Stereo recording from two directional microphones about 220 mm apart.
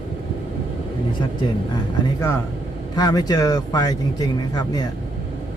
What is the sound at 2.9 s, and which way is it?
Speech, 20° left (ahead or behind).